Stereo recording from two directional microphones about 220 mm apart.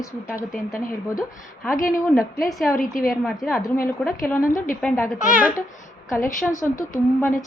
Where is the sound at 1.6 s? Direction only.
Centre (ahead or behind).